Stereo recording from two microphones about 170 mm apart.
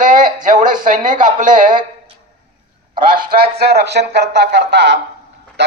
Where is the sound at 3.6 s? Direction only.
75° right (ahead or behind).